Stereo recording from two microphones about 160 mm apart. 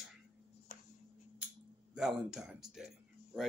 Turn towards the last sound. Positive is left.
turn(degrees=-5)  # may be behind; listen again after turning